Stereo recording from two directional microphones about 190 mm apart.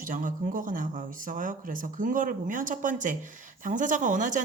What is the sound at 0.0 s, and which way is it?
Speech, 45° right (ahead or behind).